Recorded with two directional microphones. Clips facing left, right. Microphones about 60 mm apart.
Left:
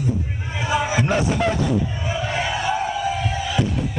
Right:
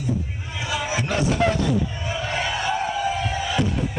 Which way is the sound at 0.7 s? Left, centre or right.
Left.